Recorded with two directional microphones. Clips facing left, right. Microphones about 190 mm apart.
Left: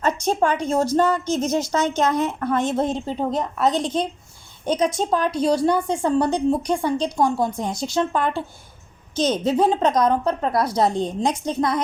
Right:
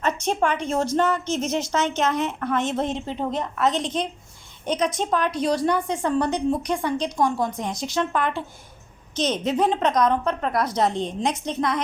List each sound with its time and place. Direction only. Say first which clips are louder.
0.0 s a woman's voice: left 3 dB; 35° left (ahead or behind)